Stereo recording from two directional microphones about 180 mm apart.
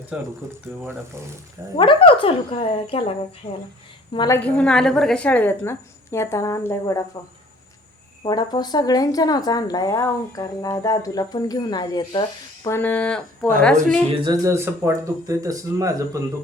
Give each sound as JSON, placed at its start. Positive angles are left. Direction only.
{"t": 0.1, "sound": "speech", "side_deg": -5}
{"t": 1.7, "sound": "speech", "side_deg": 30}
{"t": 4.1, "sound": "a woman's voice", "side_deg": 25}
{"t": 4.4, "sound": "a woman's voice", "side_deg": 5}
{"t": 8.2, "sound": "a woman's voice", "side_deg": 25}
{"t": 12.6, "sound": "a woman's voice", "side_deg": 10}
{"t": 14.1, "sound": "speech", "side_deg": -25}